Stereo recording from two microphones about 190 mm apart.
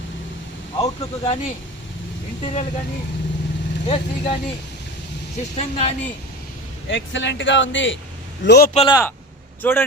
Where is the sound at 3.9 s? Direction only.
30° left (ahead or behind).